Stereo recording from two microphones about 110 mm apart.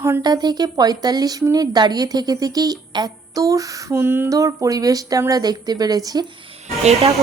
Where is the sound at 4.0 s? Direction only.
20° right (ahead or behind).